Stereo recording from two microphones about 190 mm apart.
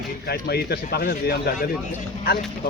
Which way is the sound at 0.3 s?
55° left (ahead or behind).